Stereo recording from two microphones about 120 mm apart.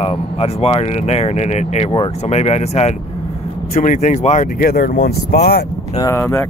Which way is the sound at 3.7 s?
90° left.